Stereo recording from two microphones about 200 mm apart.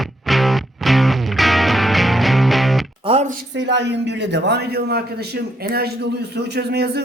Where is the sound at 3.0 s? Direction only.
30° right (ahead or behind).